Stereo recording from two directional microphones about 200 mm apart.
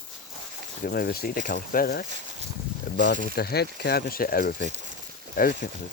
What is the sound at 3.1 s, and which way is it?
Speech, 50° left (ahead or behind).